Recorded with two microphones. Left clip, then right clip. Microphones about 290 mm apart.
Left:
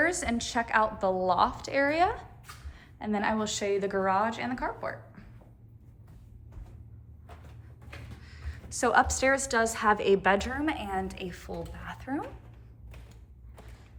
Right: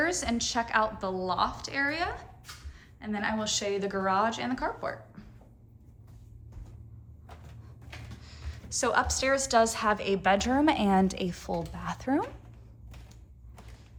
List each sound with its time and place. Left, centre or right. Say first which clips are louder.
0.0 s a woman's voice: left 1 dB; centre
8.2 s a woman's voice: even; centre
10.7 s a woman's voice: right 6 dB; centre